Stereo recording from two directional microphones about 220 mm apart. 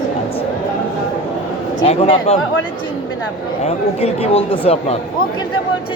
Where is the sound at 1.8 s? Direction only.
25° left (ahead or behind).